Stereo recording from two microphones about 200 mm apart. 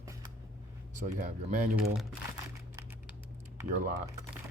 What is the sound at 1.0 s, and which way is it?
Speech, 40° right (ahead or behind).